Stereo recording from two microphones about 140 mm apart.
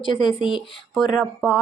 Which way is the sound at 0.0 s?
35° left (ahead or behind).